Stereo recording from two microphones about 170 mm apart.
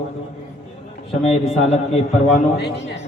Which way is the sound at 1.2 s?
40° left (ahead or behind).